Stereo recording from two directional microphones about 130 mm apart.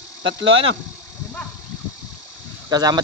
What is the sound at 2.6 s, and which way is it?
Speech, 30° right (ahead or behind).